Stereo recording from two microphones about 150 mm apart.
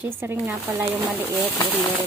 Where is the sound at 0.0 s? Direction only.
15° right (ahead or behind).